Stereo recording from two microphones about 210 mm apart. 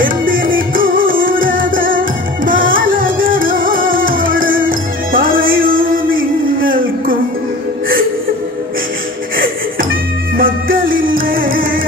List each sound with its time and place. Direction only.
0.0 s music: 40° right (ahead or behind)
10.3 s music: 45° right (ahead or behind)